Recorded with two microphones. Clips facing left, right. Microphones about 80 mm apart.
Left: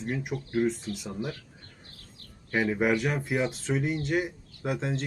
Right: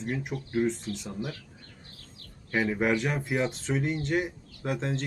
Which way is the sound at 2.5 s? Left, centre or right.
Centre.